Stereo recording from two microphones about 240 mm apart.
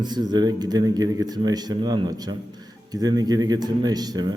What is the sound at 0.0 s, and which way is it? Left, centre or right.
A man's voice, centre.